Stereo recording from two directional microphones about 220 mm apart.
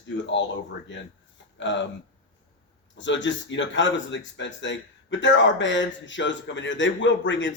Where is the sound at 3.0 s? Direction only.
55° left (ahead or behind).